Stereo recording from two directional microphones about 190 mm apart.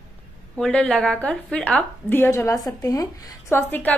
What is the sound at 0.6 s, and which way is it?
A woman's voice, 5° left (ahead or behind).